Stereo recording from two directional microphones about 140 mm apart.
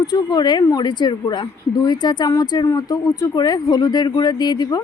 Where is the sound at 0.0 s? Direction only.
30° left (ahead or behind).